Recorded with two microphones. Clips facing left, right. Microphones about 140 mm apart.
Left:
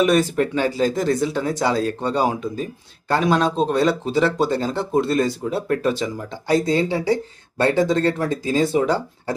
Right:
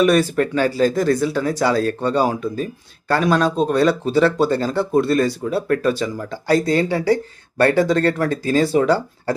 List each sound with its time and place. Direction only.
0.0 s speech: 20° left (ahead or behind)